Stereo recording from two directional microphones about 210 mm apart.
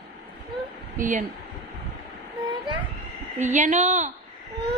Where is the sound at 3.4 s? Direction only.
35° right (ahead or behind).